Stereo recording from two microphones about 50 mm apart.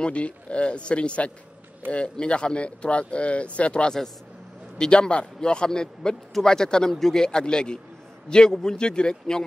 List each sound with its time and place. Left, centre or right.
0.0 s a man's voice: left